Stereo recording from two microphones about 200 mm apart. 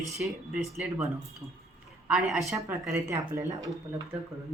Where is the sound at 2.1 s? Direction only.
Centre (ahead or behind).